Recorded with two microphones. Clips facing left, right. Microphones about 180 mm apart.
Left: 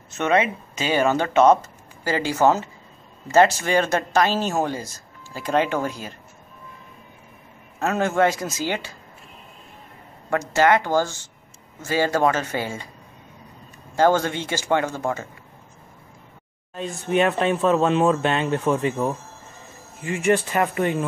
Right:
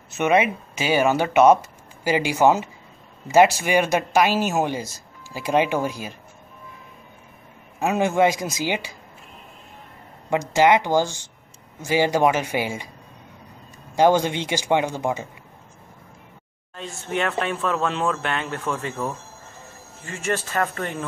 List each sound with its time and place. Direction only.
0.1 s speech: 10° right (ahead or behind)
7.8 s speech: 15° right (ahead or behind)
10.3 s speech: 15° right (ahead or behind)
13.9 s speech: 15° right (ahead or behind)
16.7 s speech: 15° left (ahead or behind)